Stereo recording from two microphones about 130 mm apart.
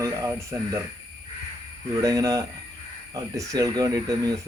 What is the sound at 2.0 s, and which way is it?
Speech, 25° right (ahead or behind).